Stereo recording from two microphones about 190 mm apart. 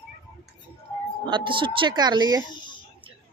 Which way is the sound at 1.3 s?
25° right (ahead or behind).